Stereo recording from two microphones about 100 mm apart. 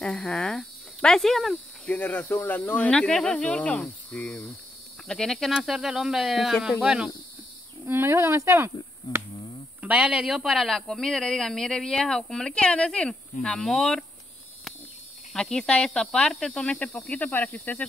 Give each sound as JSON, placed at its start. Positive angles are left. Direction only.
{"t": 0.0, "sound": "speech", "side_deg": 10}
{"t": 1.9, "sound": "speech", "side_deg": 15}
{"t": 7.8, "sound": "insect", "side_deg": -25}
{"t": 9.8, "sound": "speech", "side_deg": -10}
{"t": 15.3, "sound": "speech", "side_deg": 5}